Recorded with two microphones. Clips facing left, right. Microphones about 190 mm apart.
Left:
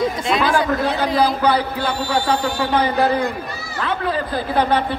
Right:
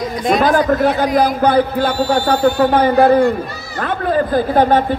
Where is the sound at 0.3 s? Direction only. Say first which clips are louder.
Right 7 dB; 45° right (ahead or behind).